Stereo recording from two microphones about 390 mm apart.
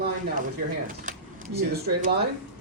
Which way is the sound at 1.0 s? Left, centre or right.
Right.